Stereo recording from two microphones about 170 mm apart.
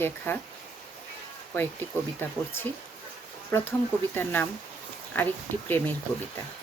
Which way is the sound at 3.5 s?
10° left (ahead or behind).